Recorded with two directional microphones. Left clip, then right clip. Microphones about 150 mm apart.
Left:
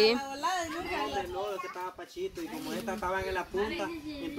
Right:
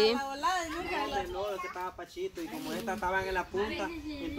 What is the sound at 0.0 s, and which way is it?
Speech, 10° left (ahead or behind).